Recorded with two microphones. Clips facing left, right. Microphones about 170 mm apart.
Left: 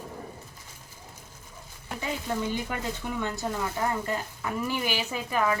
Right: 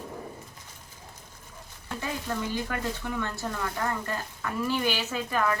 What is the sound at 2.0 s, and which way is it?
Speech, 15° left (ahead or behind).